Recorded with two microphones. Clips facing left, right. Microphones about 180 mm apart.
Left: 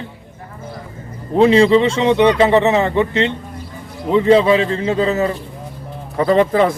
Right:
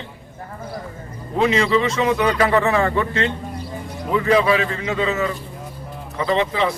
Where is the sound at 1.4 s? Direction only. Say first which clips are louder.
Left 7 dB; 30° left (ahead or behind).